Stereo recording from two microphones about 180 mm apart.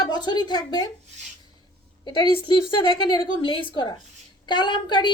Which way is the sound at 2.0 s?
25° left (ahead or behind).